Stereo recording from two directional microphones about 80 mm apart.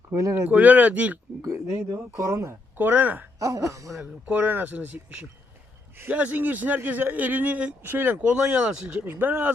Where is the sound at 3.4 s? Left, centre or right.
Right.